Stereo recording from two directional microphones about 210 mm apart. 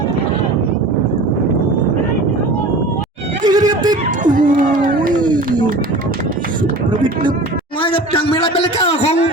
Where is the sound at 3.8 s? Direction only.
20° right (ahead or behind).